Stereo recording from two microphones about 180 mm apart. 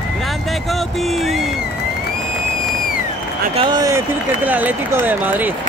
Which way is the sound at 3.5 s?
25° right (ahead or behind).